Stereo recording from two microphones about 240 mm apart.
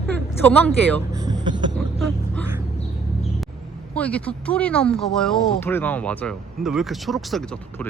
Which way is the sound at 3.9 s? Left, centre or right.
Centre.